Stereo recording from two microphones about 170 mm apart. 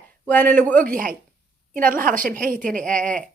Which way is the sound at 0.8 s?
55° right (ahead or behind).